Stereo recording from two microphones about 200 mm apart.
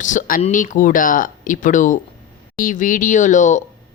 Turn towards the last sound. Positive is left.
turn(degrees=40)  # may be behind; listen again after turning